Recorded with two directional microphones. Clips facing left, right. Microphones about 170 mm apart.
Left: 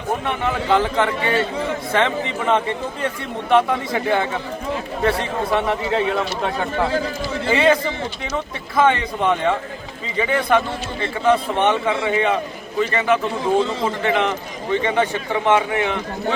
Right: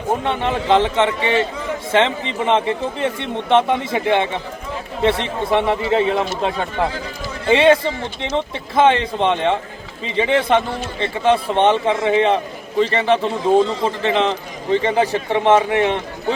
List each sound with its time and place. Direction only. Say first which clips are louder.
0.1 s a man's voice: right 3 dB; 25° right (ahead or behind)